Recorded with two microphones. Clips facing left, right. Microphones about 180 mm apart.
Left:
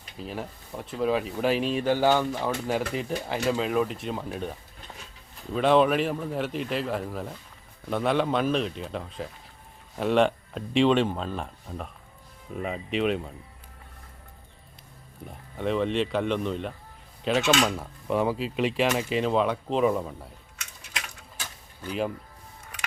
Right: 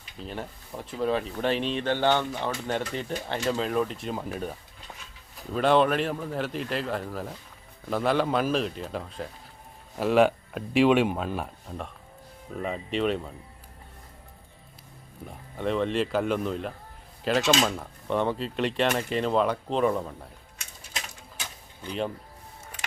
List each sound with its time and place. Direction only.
0.2 s speech: centre (ahead or behind)
15.5 s speech: centre (ahead or behind)
20.9 s a sound: 20° right (ahead or behind)
21.8 s speech: 5° left (ahead or behind)